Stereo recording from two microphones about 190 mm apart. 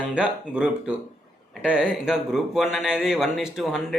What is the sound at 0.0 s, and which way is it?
A man's voice, 5° right (ahead or behind).